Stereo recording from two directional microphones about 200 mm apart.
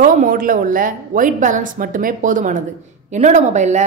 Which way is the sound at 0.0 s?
45° right (ahead or behind).